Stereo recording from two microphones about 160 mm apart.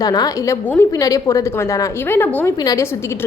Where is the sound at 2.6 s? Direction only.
20° left (ahead or behind).